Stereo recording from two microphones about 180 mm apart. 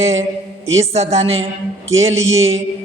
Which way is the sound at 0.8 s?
35° right (ahead or behind).